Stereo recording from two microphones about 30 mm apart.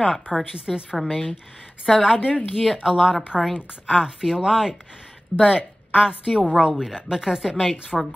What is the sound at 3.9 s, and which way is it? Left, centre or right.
Speech, right.